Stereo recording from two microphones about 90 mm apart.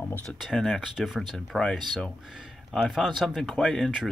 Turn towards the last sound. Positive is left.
turn(degrees=5)  # may be behind; listen again after turning